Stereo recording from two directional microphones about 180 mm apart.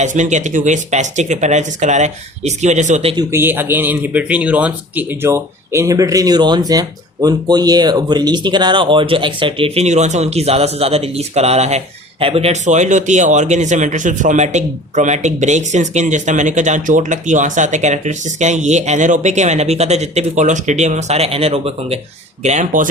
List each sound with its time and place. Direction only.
0.0 s speech: 40° right (ahead or behind)
3.3 s speech: 10° right (ahead or behind); by 21.9 s 35° right (ahead or behind)
22.4 s speech: 45° right (ahead or behind)